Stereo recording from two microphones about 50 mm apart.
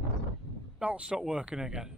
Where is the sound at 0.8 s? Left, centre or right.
Right.